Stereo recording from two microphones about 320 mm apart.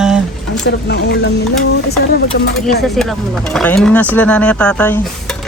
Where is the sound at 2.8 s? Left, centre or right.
Centre.